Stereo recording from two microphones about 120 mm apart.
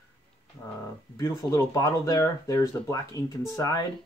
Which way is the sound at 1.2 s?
25° left (ahead or behind).